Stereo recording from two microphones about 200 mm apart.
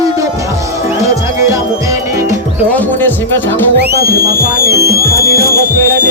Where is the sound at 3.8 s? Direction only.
55° right (ahead or behind).